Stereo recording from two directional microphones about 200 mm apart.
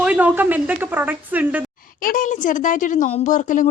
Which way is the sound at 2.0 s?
45° left (ahead or behind).